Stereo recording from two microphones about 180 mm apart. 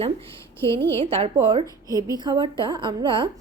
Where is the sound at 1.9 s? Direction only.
20° right (ahead or behind).